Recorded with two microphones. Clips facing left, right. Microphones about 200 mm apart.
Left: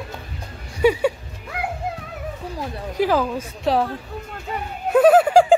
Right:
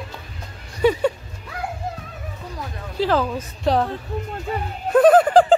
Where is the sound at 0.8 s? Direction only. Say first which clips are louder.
Left 1 dB; 10° left (ahead or behind).